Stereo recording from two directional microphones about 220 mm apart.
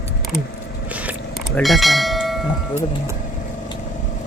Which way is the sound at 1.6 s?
Centre (ahead or behind).